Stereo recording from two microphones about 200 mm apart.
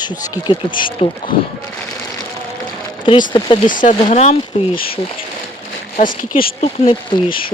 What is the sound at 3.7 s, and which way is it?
Speech, 40° left (ahead or behind).